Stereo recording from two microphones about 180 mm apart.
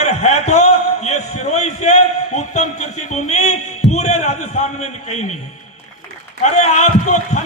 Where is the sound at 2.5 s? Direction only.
40° left (ahead or behind).